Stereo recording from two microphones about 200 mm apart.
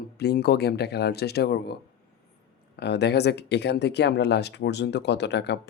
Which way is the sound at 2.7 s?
55° left (ahead or behind).